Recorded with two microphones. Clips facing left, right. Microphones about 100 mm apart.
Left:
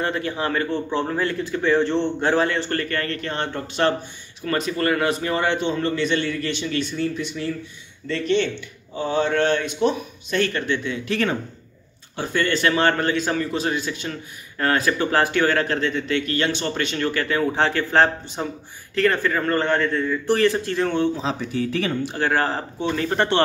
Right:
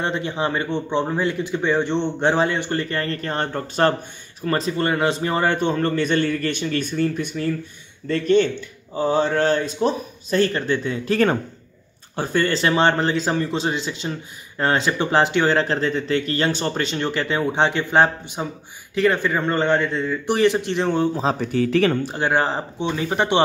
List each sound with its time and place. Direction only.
0.0 s a man's voice: 25° right (ahead or behind); by 3.9 s 40° right (ahead or behind)
4.5 s a man's voice: 30° right (ahead or behind)
21.4 s speech: 65° right (ahead or behind)
22.1 s a man's voice: 20° right (ahead or behind)